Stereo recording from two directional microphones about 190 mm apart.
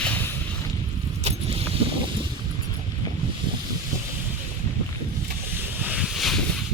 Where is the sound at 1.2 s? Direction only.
30° right (ahead or behind).